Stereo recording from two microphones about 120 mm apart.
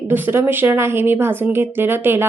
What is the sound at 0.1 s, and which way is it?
Speech, 15° right (ahead or behind).